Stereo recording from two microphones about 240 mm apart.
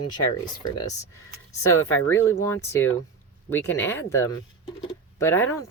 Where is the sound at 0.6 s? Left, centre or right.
Centre.